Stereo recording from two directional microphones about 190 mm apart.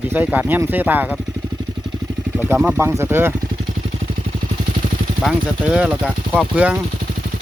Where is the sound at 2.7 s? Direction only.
15° right (ahead or behind).